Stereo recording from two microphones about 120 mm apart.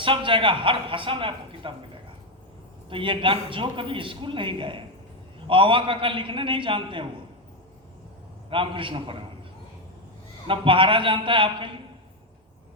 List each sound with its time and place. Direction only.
0.0 s a man's voice: 45° right (ahead or behind)
2.9 s a man's voice: 45° right (ahead or behind)
8.4 s a man's voice: 45° right (ahead or behind)
10.4 s a man's voice: 45° right (ahead or behind)